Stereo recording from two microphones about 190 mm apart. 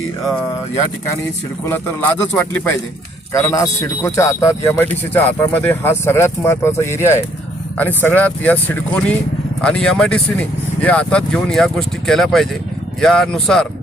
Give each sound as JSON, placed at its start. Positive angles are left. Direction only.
{"t": 1.6, "sound": "speech", "side_deg": 10}